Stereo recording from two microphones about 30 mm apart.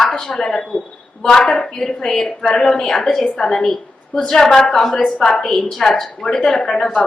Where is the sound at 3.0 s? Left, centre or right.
Centre.